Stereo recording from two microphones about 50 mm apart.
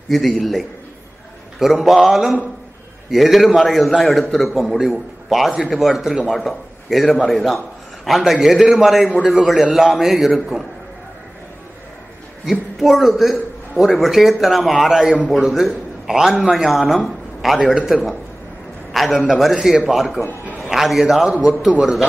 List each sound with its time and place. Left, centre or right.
0.1 s a man's voice: centre
1.6 s a man's voice: centre
12.4 s a man's voice: centre
21.5 s a man's voice: right